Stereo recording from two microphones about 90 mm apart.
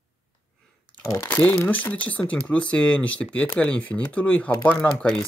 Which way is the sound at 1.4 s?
20° left (ahead or behind).